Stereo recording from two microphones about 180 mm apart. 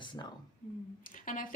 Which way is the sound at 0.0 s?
25° left (ahead or behind).